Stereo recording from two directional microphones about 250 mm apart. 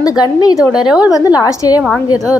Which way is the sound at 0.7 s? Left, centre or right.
Centre.